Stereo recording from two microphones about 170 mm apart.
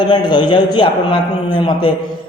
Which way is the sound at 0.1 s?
25° left (ahead or behind).